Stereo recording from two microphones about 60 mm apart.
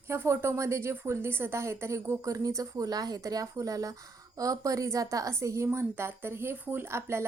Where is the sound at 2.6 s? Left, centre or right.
Right.